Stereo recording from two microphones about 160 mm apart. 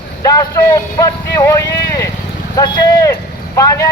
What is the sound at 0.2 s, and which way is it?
Speech, 20° left (ahead or behind).